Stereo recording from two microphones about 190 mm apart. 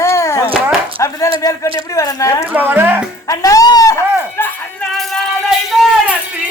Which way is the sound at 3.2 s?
20° left (ahead or behind).